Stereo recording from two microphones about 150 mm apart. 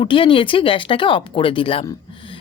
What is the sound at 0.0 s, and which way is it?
A woman's voice, 35° left (ahead or behind).